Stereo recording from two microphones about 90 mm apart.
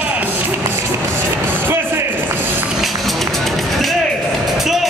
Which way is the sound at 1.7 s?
25° right (ahead or behind).